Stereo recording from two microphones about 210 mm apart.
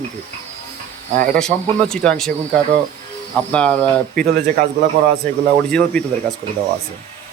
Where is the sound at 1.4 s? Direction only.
5° left (ahead or behind).